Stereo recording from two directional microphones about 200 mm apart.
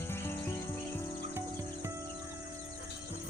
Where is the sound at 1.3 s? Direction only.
15° right (ahead or behind).